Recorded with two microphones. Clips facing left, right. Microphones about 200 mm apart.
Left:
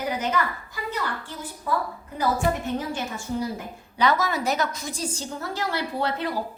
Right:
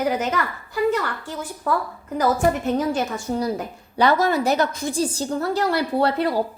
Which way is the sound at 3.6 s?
35° right (ahead or behind).